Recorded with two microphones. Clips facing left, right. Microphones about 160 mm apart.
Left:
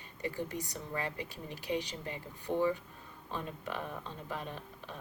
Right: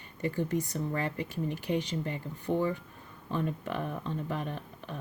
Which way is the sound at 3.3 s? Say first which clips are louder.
Right 7 dB; 50° right (ahead or behind).